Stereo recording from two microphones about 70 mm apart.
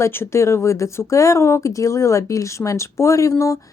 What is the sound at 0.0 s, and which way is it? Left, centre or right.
A woman's voice, left.